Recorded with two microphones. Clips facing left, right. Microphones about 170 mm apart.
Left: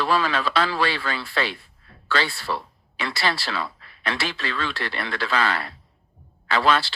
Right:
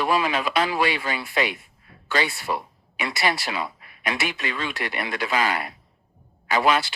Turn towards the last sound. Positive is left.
turn(degrees=-20)  # may be behind; listen again after turning